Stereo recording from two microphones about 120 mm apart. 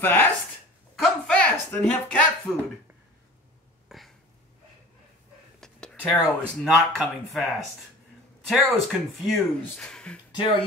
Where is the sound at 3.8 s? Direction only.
Centre (ahead or behind).